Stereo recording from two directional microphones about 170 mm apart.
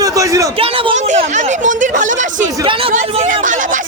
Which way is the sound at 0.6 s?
40° right (ahead or behind).